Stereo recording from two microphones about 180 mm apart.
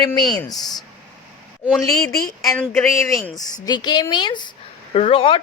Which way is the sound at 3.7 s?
25° left (ahead or behind).